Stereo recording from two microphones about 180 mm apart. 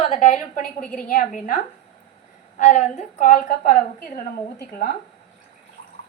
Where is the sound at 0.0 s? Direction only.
40° left (ahead or behind).